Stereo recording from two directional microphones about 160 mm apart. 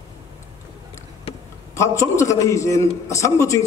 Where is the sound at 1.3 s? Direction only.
40° left (ahead or behind).